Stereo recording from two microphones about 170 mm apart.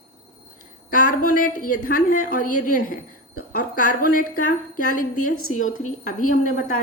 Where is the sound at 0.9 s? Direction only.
55° left (ahead or behind).